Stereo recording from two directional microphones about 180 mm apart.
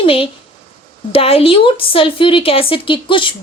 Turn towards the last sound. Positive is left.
turn(degrees=30)  # may be behind; listen again after turning